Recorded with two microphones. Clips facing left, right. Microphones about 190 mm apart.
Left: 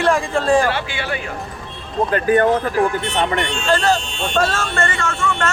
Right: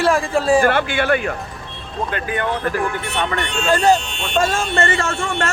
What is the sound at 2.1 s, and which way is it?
Speech, 40° left (ahead or behind).